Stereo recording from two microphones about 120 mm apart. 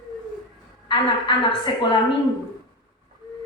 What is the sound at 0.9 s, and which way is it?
A woman's voice, 40° left (ahead or behind).